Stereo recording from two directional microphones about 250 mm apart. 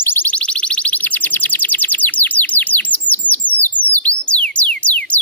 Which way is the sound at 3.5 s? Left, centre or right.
Left.